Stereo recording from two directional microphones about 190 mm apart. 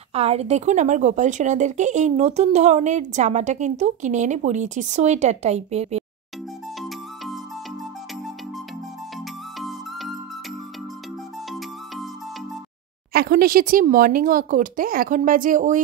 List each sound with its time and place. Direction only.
0.1 s speech: 35° right (ahead or behind)
9.6 s music: centre (ahead or behind)
13.1 s speech: 50° right (ahead or behind)